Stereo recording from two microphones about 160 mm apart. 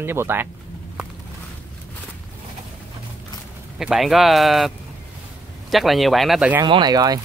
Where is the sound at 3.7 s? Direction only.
Centre (ahead or behind).